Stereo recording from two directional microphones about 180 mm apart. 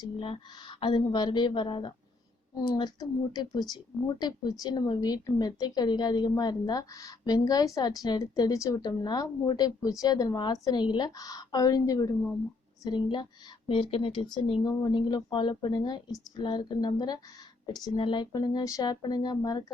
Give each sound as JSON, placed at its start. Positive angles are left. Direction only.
{"t": 0.0, "sound": "speech", "side_deg": 25}